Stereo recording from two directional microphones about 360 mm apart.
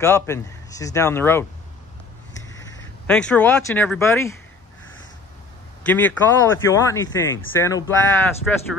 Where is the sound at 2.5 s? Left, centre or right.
Centre.